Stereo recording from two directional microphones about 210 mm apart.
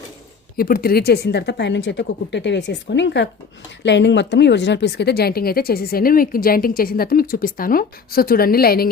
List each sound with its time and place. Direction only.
0.5 s speech: 45° left (ahead or behind)